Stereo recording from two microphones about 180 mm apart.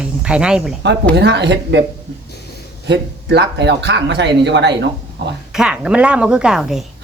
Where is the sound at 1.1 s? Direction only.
70° right (ahead or behind).